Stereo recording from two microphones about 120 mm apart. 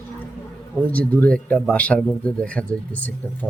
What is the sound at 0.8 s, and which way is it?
Speech, 15° left (ahead or behind).